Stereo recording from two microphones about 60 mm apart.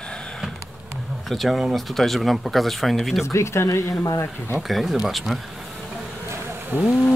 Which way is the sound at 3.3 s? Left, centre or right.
Left.